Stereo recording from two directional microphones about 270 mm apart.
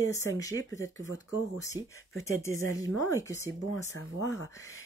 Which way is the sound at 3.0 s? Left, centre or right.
Centre.